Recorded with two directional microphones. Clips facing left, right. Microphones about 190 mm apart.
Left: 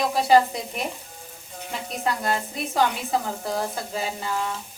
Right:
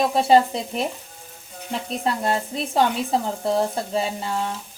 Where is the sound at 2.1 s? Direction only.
30° right (ahead or behind).